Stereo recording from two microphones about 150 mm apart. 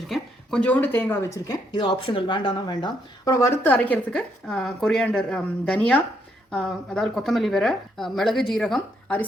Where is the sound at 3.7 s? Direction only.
5° left (ahead or behind).